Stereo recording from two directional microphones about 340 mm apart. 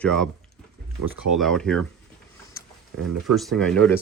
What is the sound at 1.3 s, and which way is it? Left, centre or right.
Speech, centre.